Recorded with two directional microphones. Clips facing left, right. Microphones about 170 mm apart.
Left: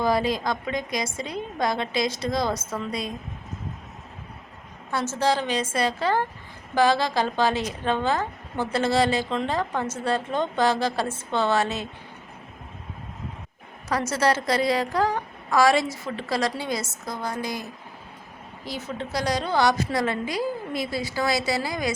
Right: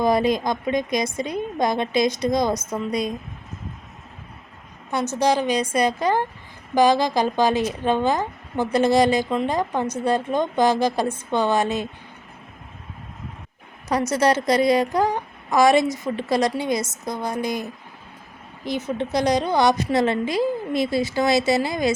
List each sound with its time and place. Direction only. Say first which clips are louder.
0.0 s a woman's voice: right 4 dB; 20° right (ahead or behind)
4.9 s a woman's voice: right 3 dB; 15° right (ahead or behind)
13.8 s a woman's voice: right 4 dB; 20° right (ahead or behind)